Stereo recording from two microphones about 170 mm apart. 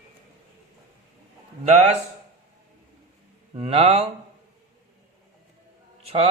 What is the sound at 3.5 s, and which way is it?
Speech, 35° right (ahead or behind).